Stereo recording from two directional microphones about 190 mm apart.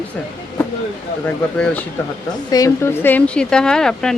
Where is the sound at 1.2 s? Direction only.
5° left (ahead or behind).